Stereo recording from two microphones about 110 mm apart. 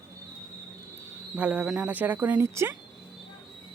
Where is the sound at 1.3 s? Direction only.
10° right (ahead or behind).